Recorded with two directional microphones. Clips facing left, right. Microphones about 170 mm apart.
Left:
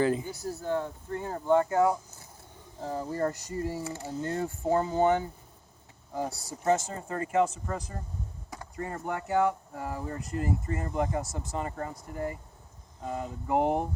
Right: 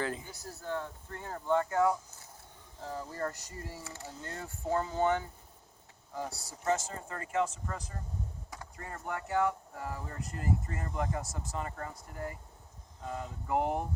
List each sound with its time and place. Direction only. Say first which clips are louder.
0.0 s speech: left 9 dB; 10° left (ahead or behind)
2.8 s speech: left 6 dB; 30° left (ahead or behind)
3.1 s speech: left 7 dB; 20° left (ahead or behind)
8.7 s speech: left 6 dB; 15° left (ahead or behind)